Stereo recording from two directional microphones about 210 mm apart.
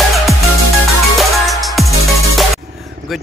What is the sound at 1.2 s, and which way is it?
Music, centre (ahead or behind).